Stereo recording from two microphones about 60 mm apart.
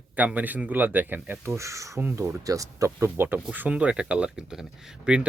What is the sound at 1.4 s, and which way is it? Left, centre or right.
Speech, right.